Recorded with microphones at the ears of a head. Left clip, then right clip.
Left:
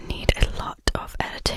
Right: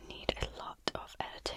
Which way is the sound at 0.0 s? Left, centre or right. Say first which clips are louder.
Left 12 dB; left.